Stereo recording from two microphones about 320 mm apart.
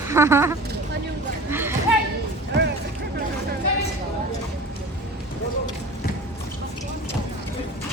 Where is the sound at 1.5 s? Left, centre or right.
Centre.